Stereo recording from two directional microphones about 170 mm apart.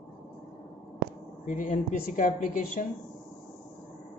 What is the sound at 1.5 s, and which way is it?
Speech, 50° left (ahead or behind).